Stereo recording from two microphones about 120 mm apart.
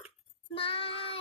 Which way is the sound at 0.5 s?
50° left (ahead or behind).